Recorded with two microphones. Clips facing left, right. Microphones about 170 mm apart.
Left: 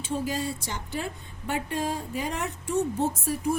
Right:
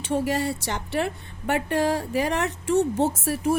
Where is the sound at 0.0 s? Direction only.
70° right (ahead or behind).